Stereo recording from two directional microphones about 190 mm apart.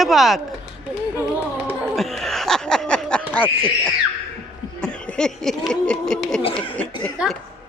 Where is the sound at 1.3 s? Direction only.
5° right (ahead or behind).